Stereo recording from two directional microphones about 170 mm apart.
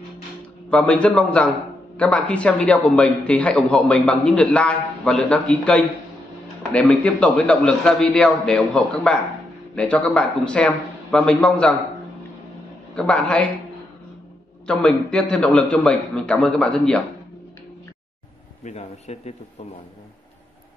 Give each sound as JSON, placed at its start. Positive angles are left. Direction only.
{"t": 0.7, "sound": "a man's voice", "side_deg": 5}
{"t": 12.9, "sound": "a man's voice", "side_deg": 5}
{"t": 14.7, "sound": "a man's voice", "side_deg": 5}
{"t": 18.6, "sound": "speech", "side_deg": 40}